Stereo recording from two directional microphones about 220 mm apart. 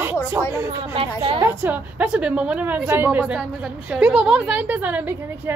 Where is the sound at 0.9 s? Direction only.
25° right (ahead or behind).